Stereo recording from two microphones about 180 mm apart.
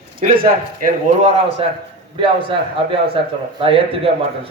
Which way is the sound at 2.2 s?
30° right (ahead or behind).